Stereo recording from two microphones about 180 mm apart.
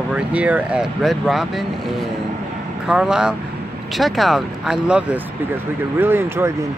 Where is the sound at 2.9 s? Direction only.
5° right (ahead or behind).